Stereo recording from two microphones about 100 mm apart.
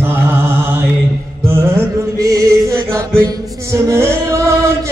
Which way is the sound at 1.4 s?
25° right (ahead or behind).